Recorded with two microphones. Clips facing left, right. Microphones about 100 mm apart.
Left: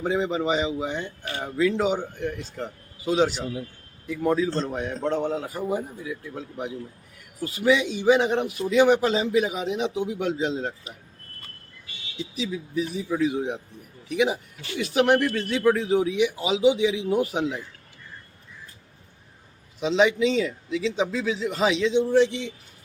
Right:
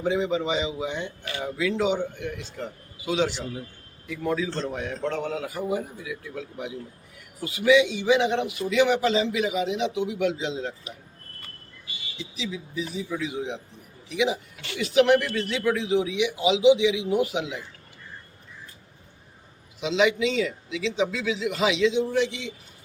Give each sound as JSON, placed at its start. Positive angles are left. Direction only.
{"t": 0.0, "sound": "a man's voice", "side_deg": 40}
{"t": 4.4, "sound": "a man's voice", "side_deg": 35}
{"t": 12.4, "sound": "a man's voice", "side_deg": 50}
{"t": 19.8, "sound": "a man's voice", "side_deg": 40}